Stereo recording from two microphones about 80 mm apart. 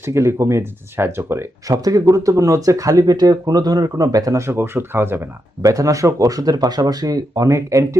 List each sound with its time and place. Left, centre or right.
0.1 s speech: right
1.6 s speech: right
5.6 s speech: right